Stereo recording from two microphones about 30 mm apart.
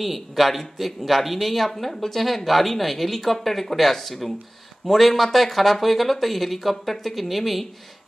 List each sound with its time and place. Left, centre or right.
0.0 s speech: centre